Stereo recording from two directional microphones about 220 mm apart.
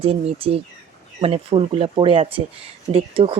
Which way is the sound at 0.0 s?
25° right (ahead or behind).